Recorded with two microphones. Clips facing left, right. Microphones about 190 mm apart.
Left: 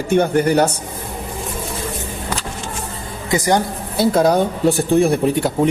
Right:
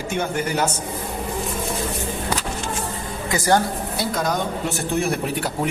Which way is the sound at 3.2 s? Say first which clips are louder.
Left 2 dB; 15° left (ahead or behind).